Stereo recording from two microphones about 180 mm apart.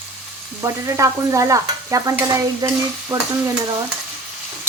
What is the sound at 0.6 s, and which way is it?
Stir, 15° right (ahead or behind).